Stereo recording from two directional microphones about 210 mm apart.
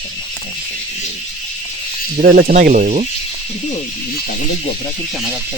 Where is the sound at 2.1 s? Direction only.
40° right (ahead or behind).